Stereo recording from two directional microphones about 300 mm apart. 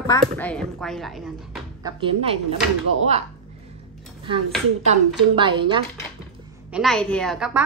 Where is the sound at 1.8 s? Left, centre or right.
Centre.